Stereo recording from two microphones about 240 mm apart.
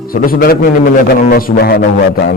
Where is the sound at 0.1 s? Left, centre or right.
Left.